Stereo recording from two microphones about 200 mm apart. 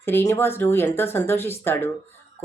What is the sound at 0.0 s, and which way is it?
Speech, 10° left (ahead or behind).